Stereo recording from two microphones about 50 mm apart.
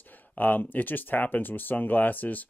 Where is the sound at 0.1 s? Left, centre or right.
Left.